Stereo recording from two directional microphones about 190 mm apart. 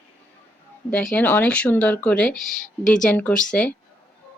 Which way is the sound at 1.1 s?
10° left (ahead or behind).